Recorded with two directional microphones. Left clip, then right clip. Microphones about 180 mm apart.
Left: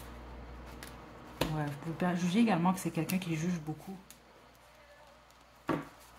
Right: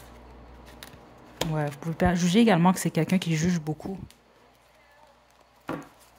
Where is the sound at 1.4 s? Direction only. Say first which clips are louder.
Right 6 dB; 45° right (ahead or behind).